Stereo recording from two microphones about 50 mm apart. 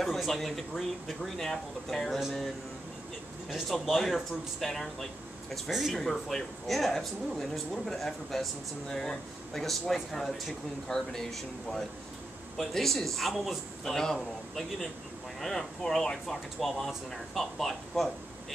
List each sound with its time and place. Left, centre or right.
0.0 s speech: centre
3.6 s speech: centre
5.7 s speech: centre
5.9 s speech: centre